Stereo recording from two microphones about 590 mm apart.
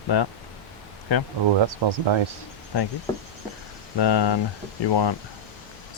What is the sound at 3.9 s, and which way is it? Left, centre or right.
Speech, left.